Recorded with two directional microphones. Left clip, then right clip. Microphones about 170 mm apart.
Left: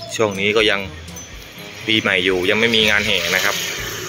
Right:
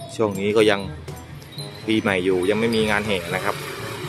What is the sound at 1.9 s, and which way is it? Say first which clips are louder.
Speech: left 4 dB; 5° right (ahead or behind).